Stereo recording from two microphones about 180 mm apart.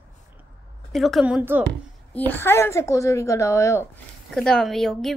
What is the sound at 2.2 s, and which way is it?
A woman's voice, 10° left (ahead or behind).